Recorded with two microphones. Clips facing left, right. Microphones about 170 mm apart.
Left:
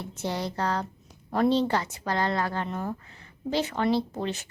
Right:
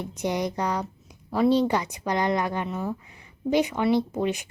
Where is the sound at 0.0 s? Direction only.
15° right (ahead or behind).